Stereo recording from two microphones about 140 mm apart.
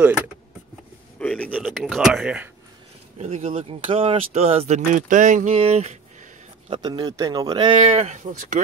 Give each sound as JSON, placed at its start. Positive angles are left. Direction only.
{"t": 1.2, "sound": "a sound", "side_deg": 10}
{"t": 1.6, "sound": "speech", "side_deg": 0}
{"t": 3.2, "sound": "speech", "side_deg": -50}
{"t": 5.6, "sound": "speech", "side_deg": -50}
{"t": 6.7, "sound": "speech", "side_deg": -30}